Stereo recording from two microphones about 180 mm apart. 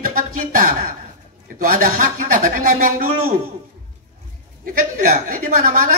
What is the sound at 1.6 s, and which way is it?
A man's voice, 50° right (ahead or behind).